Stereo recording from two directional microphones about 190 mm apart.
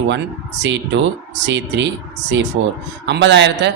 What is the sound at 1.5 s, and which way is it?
Speech, 70° right (ahead or behind).